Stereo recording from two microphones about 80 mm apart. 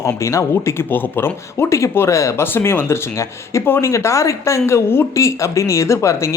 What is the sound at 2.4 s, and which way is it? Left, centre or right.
Speech, left.